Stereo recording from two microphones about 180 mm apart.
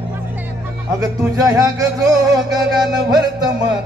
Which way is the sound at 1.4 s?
20° right (ahead or behind).